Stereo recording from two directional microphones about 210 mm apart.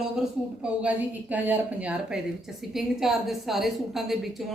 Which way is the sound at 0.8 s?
5° right (ahead or behind).